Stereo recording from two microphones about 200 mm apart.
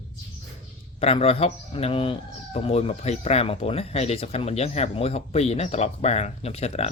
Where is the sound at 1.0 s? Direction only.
30° left (ahead or behind).